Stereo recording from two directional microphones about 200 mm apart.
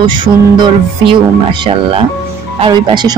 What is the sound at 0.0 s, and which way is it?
Speech, 25° right (ahead or behind).